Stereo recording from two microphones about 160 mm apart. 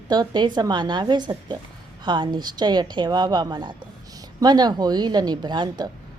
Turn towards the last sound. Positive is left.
turn(degrees=-25)  # may be behind; listen again after turning